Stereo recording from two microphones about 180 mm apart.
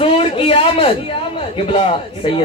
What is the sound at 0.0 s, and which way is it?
A man's voice, 30° left (ahead or behind).